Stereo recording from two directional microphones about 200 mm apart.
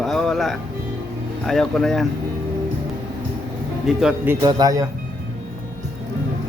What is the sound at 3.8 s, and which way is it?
Speech, 5° right (ahead or behind).